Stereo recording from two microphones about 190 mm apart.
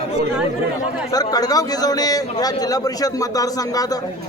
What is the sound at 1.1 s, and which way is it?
A man's voice, 20° left (ahead or behind).